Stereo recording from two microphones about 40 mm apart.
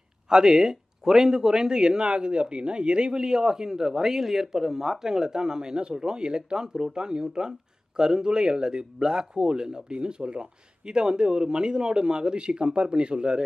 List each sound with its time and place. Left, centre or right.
0.3 s a man's voice: centre